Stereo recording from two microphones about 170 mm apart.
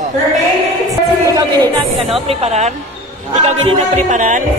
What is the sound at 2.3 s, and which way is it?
Speech, 40° right (ahead or behind).